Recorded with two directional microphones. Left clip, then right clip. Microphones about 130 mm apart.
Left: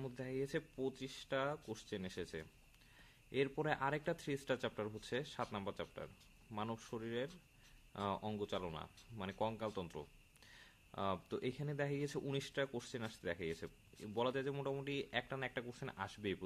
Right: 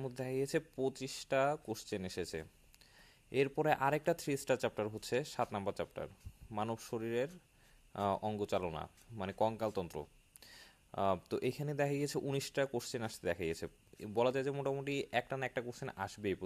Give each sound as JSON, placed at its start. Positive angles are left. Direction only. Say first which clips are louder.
{"t": 0.0, "sound": "speech", "louder": "right 5 dB", "side_deg": -50}